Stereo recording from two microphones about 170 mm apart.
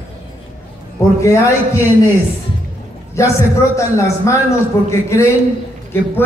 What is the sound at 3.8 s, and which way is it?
A man's voice, 20° left (ahead or behind).